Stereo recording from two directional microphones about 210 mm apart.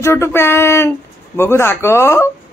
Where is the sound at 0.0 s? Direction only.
15° left (ahead or behind).